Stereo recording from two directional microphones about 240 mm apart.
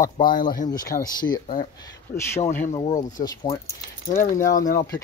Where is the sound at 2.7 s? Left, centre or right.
Centre.